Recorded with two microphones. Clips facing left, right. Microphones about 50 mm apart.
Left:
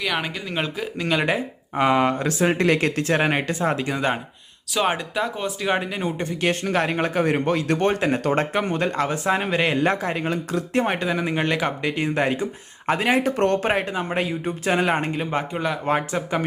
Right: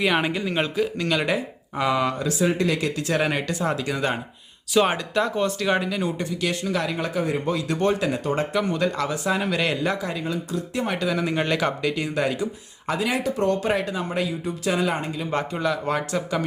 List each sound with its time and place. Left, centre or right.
0.0 s a man's voice: centre
1.0 s speech: left
1.8 s speech: left
4.7 s speech: centre; by 6.2 s left
6.4 s a man's voice: left
8.2 s speech: left
8.5 s speech: left
9.8 s a man's voice: left
10.8 s speech: left
11.2 s speech: centre
11.8 s speech: left
15.3 s speech: centre